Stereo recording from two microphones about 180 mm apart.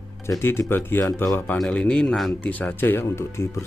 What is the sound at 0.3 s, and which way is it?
Speech, 15° left (ahead or behind).